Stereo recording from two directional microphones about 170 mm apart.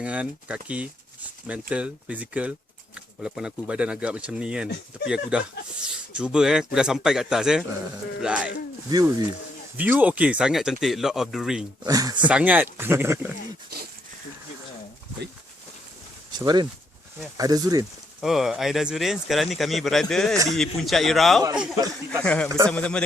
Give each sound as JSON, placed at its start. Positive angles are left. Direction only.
{"t": 0.0, "sound": "speech", "side_deg": -5}
{"t": 8.9, "sound": "speech", "side_deg": -20}
{"t": 9.7, "sound": "speech", "side_deg": -10}
{"t": 11.8, "sound": "speech", "side_deg": -20}
{"t": 12.3, "sound": "speech", "side_deg": -10}
{"t": 16.4, "sound": "speech", "side_deg": -25}
{"t": 18.2, "sound": "speech", "side_deg": 0}
{"t": 22.2, "sound": "a man's voice", "side_deg": 5}
{"t": 22.4, "sound": "speech", "side_deg": -20}
{"t": 22.7, "sound": "a man's voice", "side_deg": 5}